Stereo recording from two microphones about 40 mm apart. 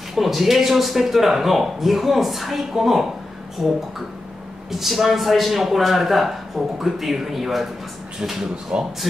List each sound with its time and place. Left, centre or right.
0.1 s speech: centre
4.6 s speech: centre